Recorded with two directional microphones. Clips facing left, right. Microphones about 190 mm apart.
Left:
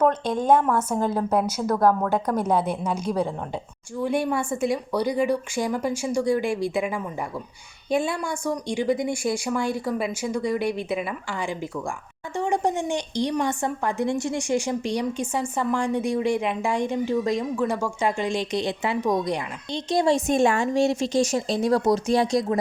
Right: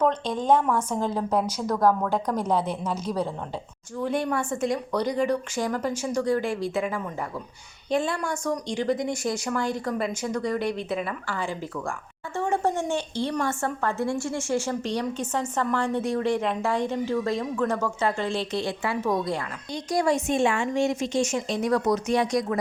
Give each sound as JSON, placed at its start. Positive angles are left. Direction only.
{"t": 0.0, "sound": "a woman's voice", "side_deg": 10}
{"t": 20.2, "sound": "a woman's voice", "side_deg": 40}